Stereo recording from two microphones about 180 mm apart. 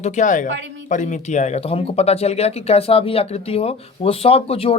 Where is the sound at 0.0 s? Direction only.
45° left (ahead or behind).